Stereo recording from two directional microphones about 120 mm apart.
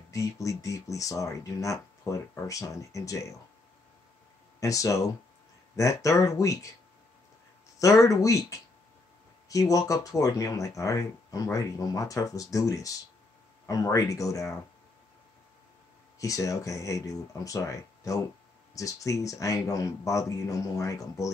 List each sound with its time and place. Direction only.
0.1 s speech: 25° left (ahead or behind)
4.6 s speech: 30° left (ahead or behind)
7.8 s speech: 25° left (ahead or behind)
16.2 s speech: 30° left (ahead or behind)